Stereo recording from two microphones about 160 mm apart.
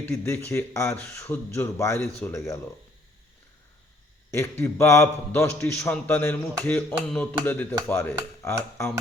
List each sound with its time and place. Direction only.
0.0 s a man's voice: 15° left (ahead or behind)
4.3 s a man's voice: 15° left (ahead or behind)